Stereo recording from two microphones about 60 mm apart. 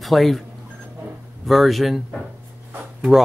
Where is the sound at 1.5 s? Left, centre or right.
Centre.